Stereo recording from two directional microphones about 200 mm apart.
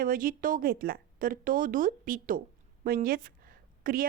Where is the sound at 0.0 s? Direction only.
45° right (ahead or behind).